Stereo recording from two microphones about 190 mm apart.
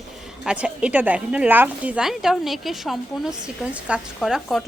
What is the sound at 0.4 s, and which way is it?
A woman's voice, 5° right (ahead or behind).